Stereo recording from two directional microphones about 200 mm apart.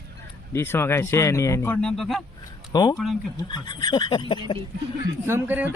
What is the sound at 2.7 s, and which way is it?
Speech, 20° left (ahead or behind).